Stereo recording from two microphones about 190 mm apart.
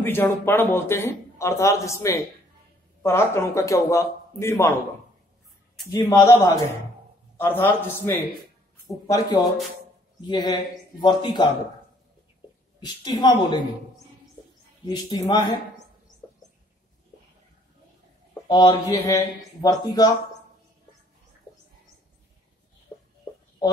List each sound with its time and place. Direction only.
0.0 s a man's voice: 10° left (ahead or behind)
5.9 s a man's voice: 15° left (ahead or behind)
12.8 s speech: 25° left (ahead or behind)
14.9 s speech: 20° left (ahead or behind)
18.5 s speech: 20° left (ahead or behind)